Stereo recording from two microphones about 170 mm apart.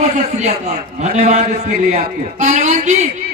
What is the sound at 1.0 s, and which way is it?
A man's voice, 40° right (ahead or behind).